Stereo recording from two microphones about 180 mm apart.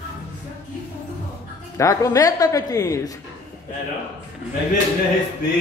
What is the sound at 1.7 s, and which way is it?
A man's voice, 20° left (ahead or behind).